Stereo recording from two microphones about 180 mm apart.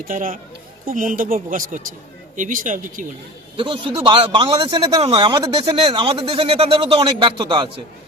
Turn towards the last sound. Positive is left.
turn(degrees=-25)  # may be behind; listen again after turning